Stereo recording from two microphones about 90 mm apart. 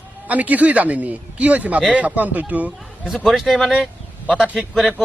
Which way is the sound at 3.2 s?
Centre (ahead or behind).